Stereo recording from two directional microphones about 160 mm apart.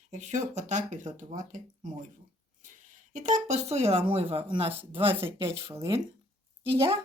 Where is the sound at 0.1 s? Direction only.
50° right (ahead or behind).